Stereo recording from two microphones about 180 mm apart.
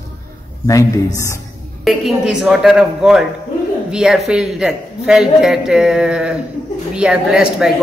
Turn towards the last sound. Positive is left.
turn(degrees=-5)  # may be behind; listen again after turning